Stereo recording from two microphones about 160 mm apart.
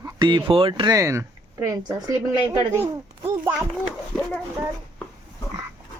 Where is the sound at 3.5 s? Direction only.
Centre (ahead or behind).